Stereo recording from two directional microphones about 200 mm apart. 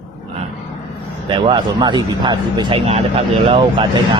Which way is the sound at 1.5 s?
20° right (ahead or behind).